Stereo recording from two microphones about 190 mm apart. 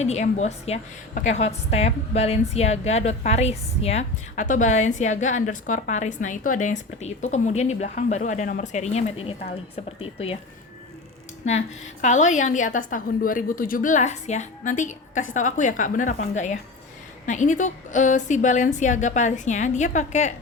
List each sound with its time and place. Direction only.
0.0 s a woman's voice: 35° left (ahead or behind)
12.0 s a woman's voice: 40° left (ahead or behind)